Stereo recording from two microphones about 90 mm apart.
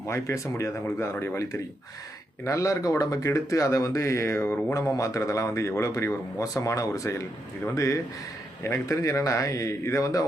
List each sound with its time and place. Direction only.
0.1 s speech: 35° left (ahead or behind)